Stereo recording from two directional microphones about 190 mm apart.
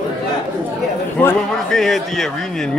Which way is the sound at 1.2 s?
10° left (ahead or behind).